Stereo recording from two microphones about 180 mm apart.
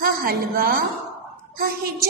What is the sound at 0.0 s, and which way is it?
Speech, 55° right (ahead or behind).